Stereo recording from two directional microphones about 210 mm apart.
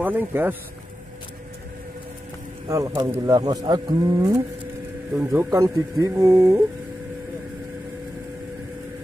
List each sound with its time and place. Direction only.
0.0 s speech: 10° right (ahead or behind)
2.7 s speech: 15° right (ahead or behind)